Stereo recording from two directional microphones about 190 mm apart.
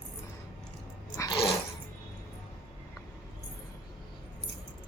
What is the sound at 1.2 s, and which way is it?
Dog, 25° left (ahead or behind).